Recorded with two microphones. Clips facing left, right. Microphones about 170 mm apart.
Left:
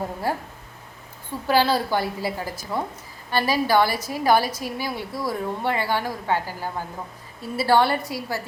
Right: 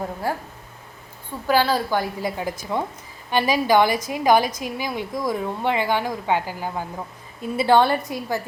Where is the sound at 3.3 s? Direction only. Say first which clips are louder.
Right 2 dB; 15° right (ahead or behind).